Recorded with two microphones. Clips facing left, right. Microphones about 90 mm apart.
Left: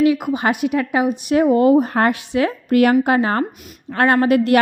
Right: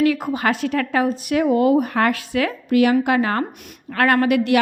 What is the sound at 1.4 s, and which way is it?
A woman's voice, 30° left (ahead or behind).